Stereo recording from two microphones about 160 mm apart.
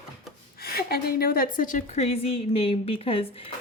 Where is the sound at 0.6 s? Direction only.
75° left (ahead or behind); by 3.5 s 35° left (ahead or behind).